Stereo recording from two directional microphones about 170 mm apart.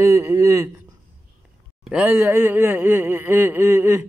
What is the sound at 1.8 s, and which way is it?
Speech, 10° right (ahead or behind).